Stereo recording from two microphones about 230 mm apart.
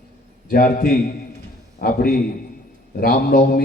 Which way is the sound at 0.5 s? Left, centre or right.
Left.